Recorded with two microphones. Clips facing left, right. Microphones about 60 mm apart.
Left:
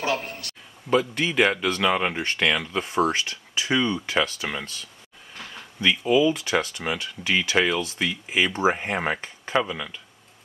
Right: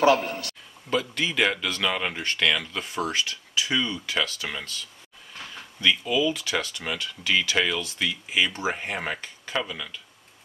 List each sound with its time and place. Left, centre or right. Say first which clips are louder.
0.8 s speech: left 4 dB; centre
4.4 s speech: left 3 dB; centre
5.8 s speech: left 4 dB; left